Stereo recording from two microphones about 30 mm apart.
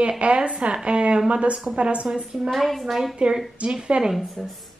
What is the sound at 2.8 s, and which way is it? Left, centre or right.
Speech, centre.